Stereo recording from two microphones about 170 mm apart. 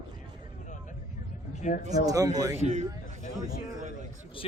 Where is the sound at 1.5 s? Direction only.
45° left (ahead or behind).